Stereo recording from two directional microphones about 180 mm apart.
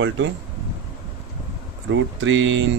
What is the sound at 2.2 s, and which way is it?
Speech, 90° right.